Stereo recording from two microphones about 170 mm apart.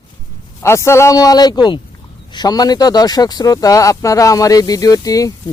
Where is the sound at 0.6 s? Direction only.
15° left (ahead or behind).